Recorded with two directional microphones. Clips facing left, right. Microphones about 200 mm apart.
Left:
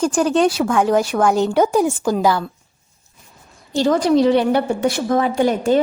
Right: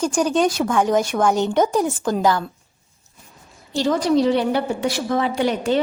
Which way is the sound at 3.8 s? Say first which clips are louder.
Left 3 dB; 55° left (ahead or behind).